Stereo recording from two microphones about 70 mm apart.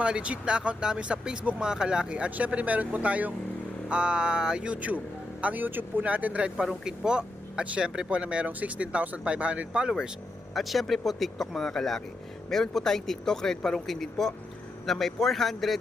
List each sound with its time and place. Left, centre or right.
0.0 s speech: centre
10.5 s speech: centre